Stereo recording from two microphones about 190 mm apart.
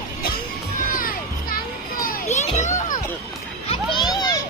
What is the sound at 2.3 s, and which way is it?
Children playing, 35° left (ahead or behind).